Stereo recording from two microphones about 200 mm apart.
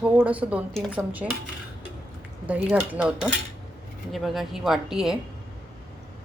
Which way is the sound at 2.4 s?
5° right (ahead or behind).